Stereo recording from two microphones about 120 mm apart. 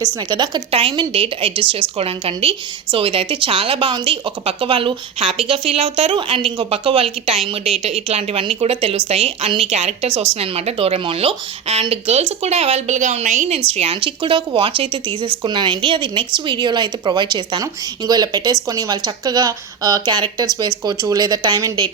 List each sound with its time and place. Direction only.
0.3 s a woman's voice: 35° right (ahead or behind)
0.7 s a woman's voice: 50° right (ahead or behind)